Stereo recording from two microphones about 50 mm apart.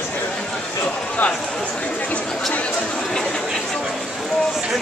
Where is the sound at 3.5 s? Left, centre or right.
Centre.